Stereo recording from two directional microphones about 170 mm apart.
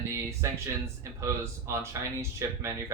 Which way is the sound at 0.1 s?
15° right (ahead or behind).